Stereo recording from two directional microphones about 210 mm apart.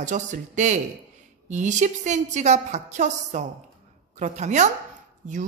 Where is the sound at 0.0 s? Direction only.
35° right (ahead or behind).